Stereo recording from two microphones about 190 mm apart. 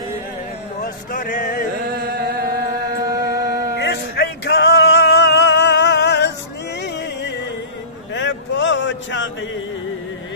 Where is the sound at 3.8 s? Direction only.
60° left (ahead or behind).